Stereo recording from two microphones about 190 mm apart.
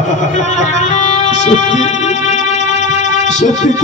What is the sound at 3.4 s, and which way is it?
Speech, 40° left (ahead or behind).